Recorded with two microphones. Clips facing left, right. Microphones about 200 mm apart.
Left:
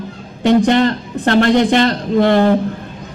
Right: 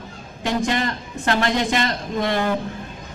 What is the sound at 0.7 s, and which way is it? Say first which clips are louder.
Speech: left 10 dB; 60° left (ahead or behind).